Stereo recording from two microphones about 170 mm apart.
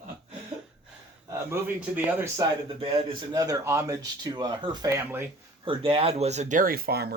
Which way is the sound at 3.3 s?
20° right (ahead or behind).